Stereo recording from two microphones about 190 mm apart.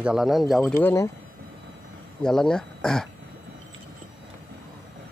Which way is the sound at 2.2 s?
5° left (ahead or behind).